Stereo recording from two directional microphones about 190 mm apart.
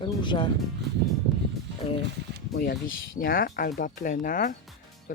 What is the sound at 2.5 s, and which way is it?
Speech, 50° left (ahead or behind).